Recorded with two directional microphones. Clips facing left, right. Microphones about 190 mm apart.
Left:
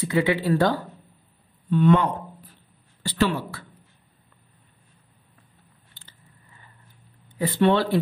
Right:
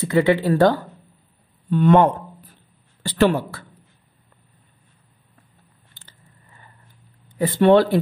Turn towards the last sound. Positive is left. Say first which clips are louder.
# right 6 dB
turn(degrees=-45)  # may be behind; listen again after turning